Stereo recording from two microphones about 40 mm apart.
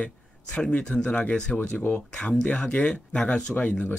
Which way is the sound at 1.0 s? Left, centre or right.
Left.